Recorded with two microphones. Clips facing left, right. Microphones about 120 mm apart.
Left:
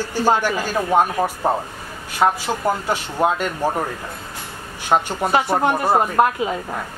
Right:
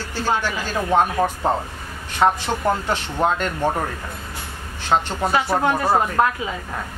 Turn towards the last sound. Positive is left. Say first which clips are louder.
# left 2 dB
turn(degrees=15)  # may be behind; listen again after turning